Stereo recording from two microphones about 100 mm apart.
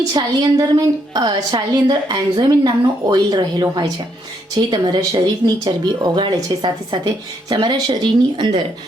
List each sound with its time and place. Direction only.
0.1 s a woman's voice: 45° right (ahead or behind)